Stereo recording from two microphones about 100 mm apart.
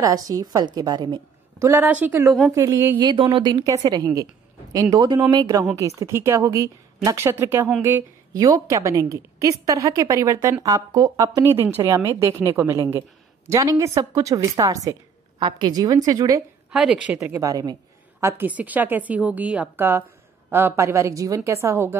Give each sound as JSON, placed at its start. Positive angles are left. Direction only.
{"t": 0.0, "sound": "a woman's voice", "side_deg": -35}
{"t": 1.6, "sound": "a woman's voice", "side_deg": -25}
{"t": 3.0, "sound": "speech", "side_deg": -55}
{"t": 3.6, "sound": "a woman's voice", "side_deg": -40}
{"t": 5.8, "sound": "a woman's voice", "side_deg": -30}
{"t": 8.3, "sound": "a woman's voice", "side_deg": -40}
{"t": 11.5, "sound": "a woman's voice", "side_deg": -20}
{"t": 15.3, "sound": "a woman's voice", "side_deg": -50}
{"t": 16.7, "sound": "a woman's voice", "side_deg": -10}
{"t": 17.2, "sound": "a woman's voice", "side_deg": -25}
{"t": 17.5, "sound": "a woman's voice", "side_deg": -35}
{"t": 18.2, "sound": "a woman's voice", "side_deg": -15}